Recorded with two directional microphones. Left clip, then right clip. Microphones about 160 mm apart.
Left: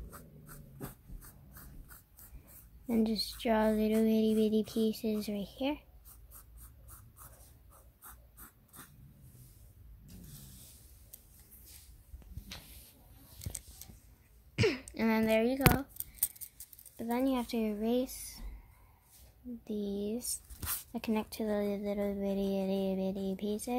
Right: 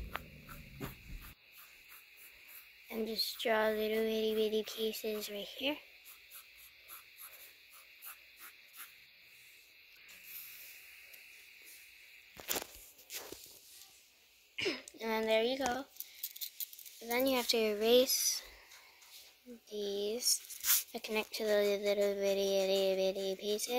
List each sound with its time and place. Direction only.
3.1 s a sound: centre (ahead or behind)
14.5 s throat clearing: 5° right (ahead or behind)
17.1 s speech: 20° right (ahead or behind)
19.7 s speech: 10° right (ahead or behind)
20.9 s speech: 20° right (ahead or behind)